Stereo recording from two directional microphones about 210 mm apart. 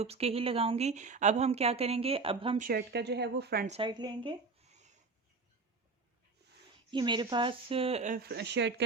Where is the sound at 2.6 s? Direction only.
45° right (ahead or behind).